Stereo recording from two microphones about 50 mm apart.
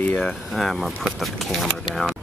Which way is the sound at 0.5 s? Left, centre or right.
Centre.